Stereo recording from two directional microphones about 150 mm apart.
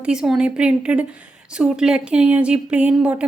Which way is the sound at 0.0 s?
5° right (ahead or behind).